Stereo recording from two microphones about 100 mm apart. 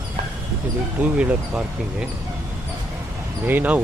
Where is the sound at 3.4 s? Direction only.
20° right (ahead or behind).